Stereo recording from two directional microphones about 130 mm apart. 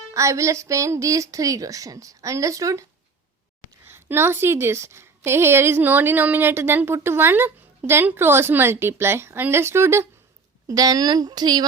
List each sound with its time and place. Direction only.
0.1 s a woman's voice: 25° right (ahead or behind)
3.8 s a woman's voice: 15° right (ahead or behind)